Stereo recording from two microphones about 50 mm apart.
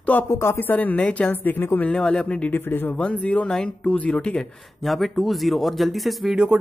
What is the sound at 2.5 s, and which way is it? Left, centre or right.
Speech, left.